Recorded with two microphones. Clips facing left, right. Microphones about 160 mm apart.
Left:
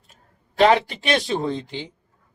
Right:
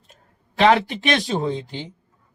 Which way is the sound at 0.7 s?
45° right (ahead or behind).